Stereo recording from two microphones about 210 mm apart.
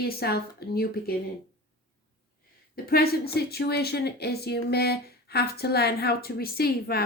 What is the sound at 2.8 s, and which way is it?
A woman's voice, 45° left (ahead or behind).